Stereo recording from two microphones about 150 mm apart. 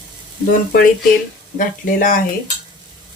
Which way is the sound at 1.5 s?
65° left (ahead or behind).